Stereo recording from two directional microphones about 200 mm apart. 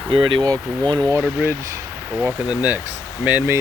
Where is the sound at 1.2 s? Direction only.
5° right (ahead or behind).